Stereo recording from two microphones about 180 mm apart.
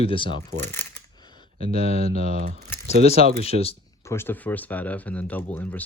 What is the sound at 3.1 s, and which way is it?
Speech, 35° left (ahead or behind).